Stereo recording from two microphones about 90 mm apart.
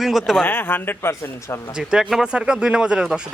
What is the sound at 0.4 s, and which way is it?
A man's voice, 20° left (ahead or behind).